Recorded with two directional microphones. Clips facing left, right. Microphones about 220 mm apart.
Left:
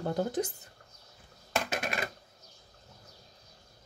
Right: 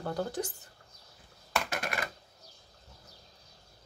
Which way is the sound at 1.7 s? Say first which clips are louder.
Left 2 dB; 20° left (ahead or behind).